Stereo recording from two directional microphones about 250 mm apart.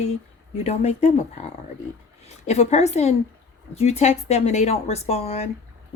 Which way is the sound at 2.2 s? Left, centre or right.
Left.